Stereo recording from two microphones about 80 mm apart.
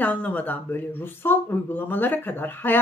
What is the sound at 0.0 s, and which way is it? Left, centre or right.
Speech, centre.